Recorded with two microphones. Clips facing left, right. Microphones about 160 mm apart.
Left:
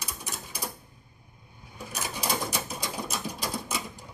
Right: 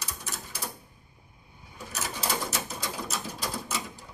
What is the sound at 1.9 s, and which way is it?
Sewing machine, 15° left (ahead or behind).